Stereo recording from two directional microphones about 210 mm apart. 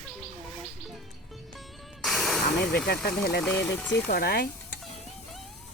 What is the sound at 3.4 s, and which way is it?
Speech, 10° left (ahead or behind).